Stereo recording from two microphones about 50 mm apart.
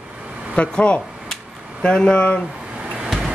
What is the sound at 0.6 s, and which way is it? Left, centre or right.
Speech, left.